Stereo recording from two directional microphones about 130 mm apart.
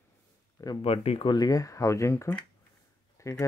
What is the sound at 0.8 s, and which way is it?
Speech, 50° left (ahead or behind).